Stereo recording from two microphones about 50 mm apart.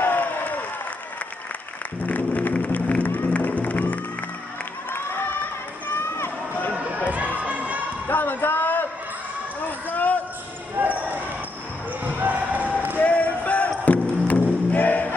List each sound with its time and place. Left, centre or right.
0.0 s applause: left
2.0 s music: left
2.5 s a sound: left
3.3 s music: left
5.9 s a sound: left
7.3 s basketball bounce: right
8.1 s a sound: left
10.8 s basketball bounce: right
13.0 s music: left